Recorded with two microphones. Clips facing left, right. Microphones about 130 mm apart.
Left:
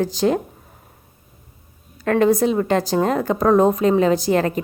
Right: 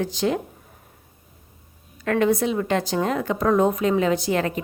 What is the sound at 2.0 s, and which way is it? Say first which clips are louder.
A woman's voice: left 4 dB; 40° left (ahead or behind).